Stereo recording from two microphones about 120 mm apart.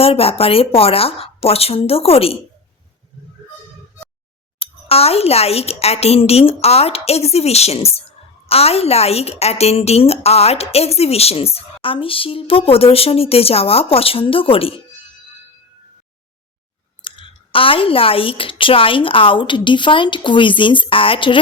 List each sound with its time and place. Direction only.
0.0 s speech: 55° left (ahead or behind)
4.6 s a woman's voice: 55° left (ahead or behind)
17.0 s speech: 45° left (ahead or behind)